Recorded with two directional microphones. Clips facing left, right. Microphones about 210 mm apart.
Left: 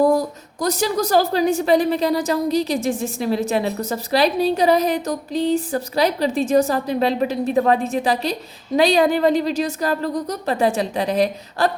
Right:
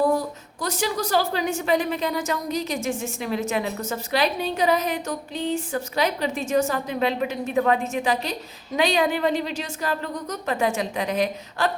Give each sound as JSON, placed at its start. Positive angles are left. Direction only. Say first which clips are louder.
{"t": 0.0, "sound": "a woman's voice", "louder": "left 5 dB", "side_deg": 40}